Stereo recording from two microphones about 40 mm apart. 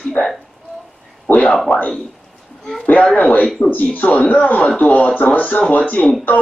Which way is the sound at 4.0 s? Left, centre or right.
Left.